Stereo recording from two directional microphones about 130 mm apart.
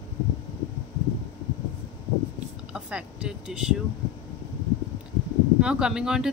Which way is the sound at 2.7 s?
10° right (ahead or behind).